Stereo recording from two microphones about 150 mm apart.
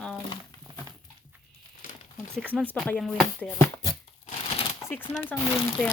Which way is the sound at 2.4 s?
10° right (ahead or behind).